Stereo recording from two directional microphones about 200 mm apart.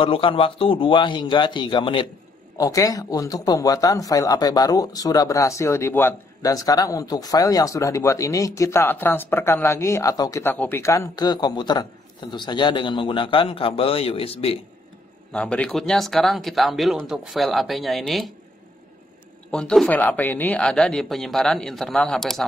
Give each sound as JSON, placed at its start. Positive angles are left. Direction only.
{"t": 0.0, "sound": "a man's voice", "side_deg": 25}
{"t": 15.3, "sound": "speech", "side_deg": 5}
{"t": 19.5, "sound": "speech", "side_deg": 5}